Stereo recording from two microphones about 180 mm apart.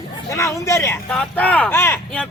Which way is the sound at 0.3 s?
15° left (ahead or behind).